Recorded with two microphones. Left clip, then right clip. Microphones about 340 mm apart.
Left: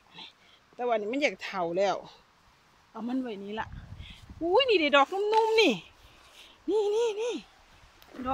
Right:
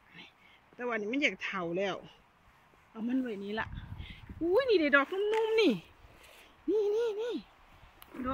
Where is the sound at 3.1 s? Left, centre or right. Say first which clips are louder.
Even; centre.